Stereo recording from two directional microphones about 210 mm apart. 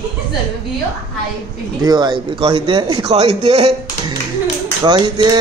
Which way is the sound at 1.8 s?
20° right (ahead or behind).